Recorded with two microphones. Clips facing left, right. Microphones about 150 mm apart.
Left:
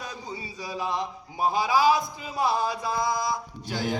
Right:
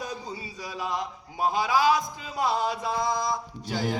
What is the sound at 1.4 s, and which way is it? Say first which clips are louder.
Speech: left 1 dB; 10° left (ahead or behind).